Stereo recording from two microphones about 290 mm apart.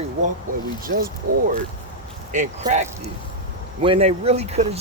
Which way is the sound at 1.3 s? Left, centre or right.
Right.